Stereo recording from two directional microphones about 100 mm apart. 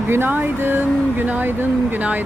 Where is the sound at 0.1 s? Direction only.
20° right (ahead or behind).